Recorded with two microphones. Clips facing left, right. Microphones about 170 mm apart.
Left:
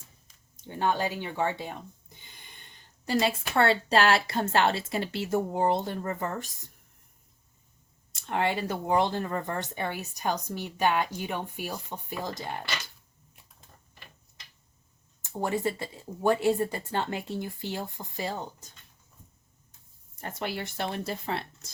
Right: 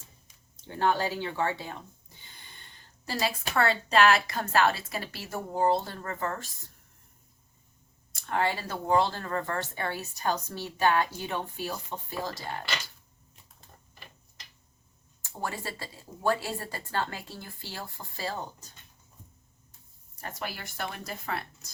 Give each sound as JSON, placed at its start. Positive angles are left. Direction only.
{"t": 0.5, "sound": "speech", "side_deg": 15}
{"t": 3.1, "sound": "speech", "side_deg": 25}
{"t": 8.1, "sound": "speech", "side_deg": 20}
{"t": 15.2, "sound": "speech", "side_deg": 20}
{"t": 20.2, "sound": "speech", "side_deg": 25}